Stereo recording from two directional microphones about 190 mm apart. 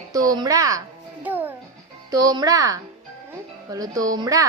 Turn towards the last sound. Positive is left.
turn(degrees=-20)  # may be behind; listen again after turning